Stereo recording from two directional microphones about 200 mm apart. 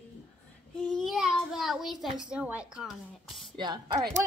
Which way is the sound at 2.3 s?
5° right (ahead or behind).